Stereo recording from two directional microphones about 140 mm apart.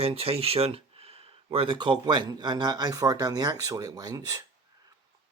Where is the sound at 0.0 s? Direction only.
45° right (ahead or behind); by 4.4 s 25° right (ahead or behind).